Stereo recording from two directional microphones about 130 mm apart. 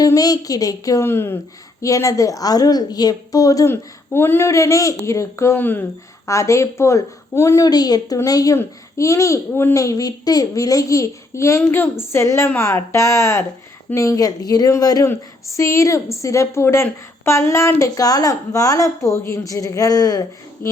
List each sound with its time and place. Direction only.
0.0 s speech: 30° left (ahead or behind)